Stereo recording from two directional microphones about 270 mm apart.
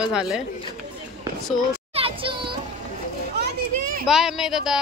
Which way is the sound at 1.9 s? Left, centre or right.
Centre.